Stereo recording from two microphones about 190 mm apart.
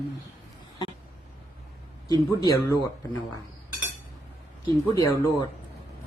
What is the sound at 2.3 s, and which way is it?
Speech, 20° left (ahead or behind).